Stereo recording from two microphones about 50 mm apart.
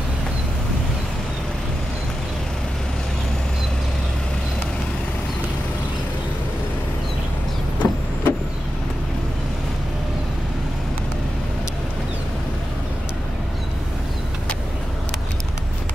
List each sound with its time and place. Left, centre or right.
7.8 s vehicle: left